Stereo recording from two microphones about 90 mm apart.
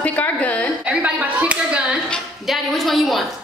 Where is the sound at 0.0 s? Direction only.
15° left (ahead or behind).